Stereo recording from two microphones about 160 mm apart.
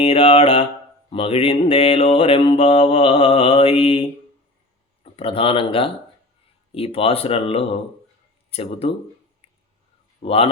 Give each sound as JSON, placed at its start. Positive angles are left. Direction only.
{"t": 0.0, "sound": "mantra", "side_deg": 35}
{"t": 5.0, "sound": "mantra", "side_deg": 35}
{"t": 9.4, "sound": "a sound", "side_deg": 35}
{"t": 10.2, "sound": "mantra", "side_deg": 35}